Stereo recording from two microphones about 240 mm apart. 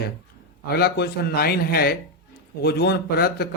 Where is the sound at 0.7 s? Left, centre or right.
Left.